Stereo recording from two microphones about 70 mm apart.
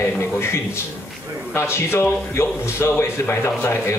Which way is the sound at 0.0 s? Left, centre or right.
Left.